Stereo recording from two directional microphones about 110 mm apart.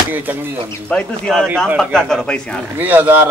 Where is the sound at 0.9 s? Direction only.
5° left (ahead or behind).